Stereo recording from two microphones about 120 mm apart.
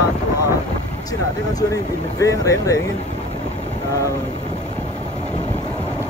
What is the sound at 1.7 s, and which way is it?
Speech, 30° left (ahead or behind).